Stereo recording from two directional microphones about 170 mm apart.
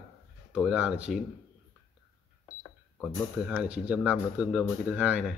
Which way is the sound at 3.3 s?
5° right (ahead or behind).